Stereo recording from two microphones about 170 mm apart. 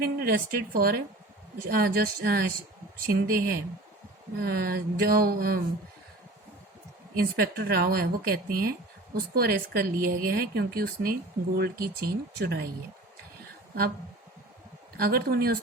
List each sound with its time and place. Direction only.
0.0 s speech: 60° right (ahead or behind)
7.3 s speech: 60° right (ahead or behind)
14.9 s speech: 60° right (ahead or behind)